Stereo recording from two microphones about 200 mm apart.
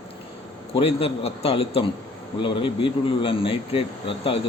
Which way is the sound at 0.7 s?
30° left (ahead or behind).